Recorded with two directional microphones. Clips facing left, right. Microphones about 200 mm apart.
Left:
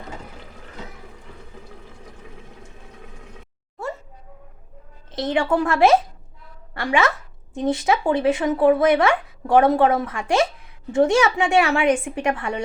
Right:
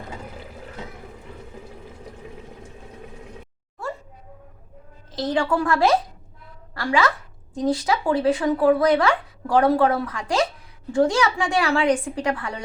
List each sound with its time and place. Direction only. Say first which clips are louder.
5.1 s speech: left 2 dB; 25° left (ahead or behind)